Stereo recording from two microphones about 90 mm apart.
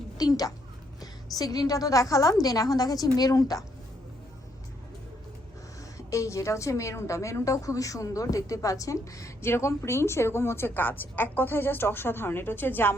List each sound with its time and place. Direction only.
0.2 s a child's voice: 45° left (ahead or behind)
6.1 s a woman's voice: 35° left (ahead or behind)